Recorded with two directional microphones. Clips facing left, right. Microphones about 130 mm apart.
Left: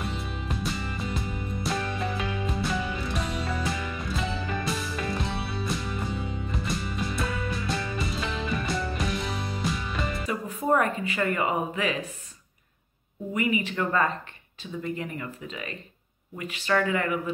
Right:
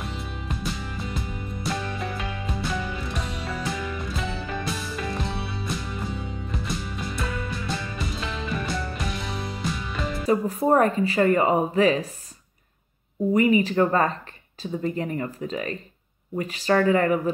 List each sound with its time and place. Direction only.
0.0 s music: centre (ahead or behind)
10.2 s speech: 35° right (ahead or behind)
13.3 s speech: 35° right (ahead or behind)